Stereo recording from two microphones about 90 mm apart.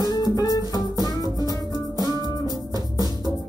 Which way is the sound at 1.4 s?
45° right (ahead or behind).